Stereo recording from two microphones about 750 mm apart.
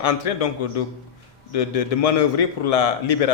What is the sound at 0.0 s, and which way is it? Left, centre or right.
Speech, left.